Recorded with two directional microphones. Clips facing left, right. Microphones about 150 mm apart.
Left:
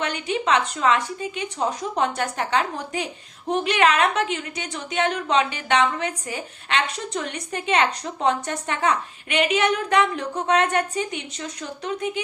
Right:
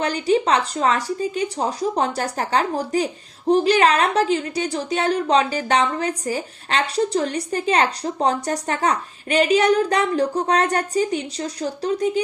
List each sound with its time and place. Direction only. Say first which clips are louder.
0.0 s a woman's voice: right 6 dB; 35° right (ahead or behind)